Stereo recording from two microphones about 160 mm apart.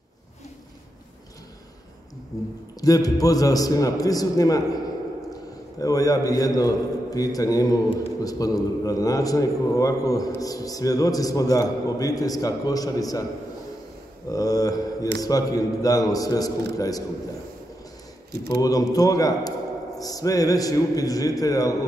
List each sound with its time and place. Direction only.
2.8 s a man's voice: 20° left (ahead or behind)
14.3 s a man's voice: 20° left (ahead or behind)
18.5 s a man's voice: 25° left (ahead or behind)